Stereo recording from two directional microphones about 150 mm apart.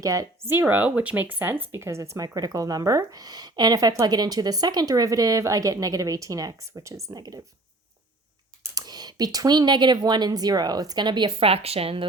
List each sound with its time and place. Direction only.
0.0 s speech: 20° right (ahead or behind)
8.7 s speech: 25° right (ahead or behind)